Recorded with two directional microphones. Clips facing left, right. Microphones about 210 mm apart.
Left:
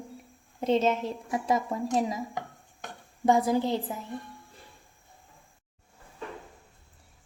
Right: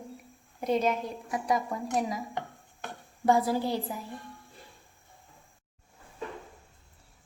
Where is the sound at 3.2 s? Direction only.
20° left (ahead or behind).